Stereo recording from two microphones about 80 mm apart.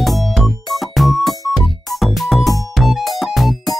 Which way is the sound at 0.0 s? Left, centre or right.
Centre.